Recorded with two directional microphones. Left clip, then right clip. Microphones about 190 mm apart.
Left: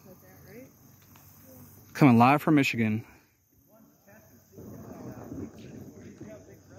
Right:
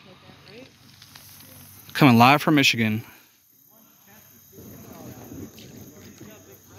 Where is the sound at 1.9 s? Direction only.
Centre (ahead or behind).